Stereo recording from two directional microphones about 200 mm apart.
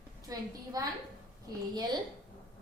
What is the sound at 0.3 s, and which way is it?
A woman's voice, 20° right (ahead or behind).